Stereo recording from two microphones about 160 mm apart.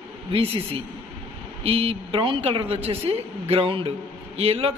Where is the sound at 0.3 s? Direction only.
35° right (ahead or behind).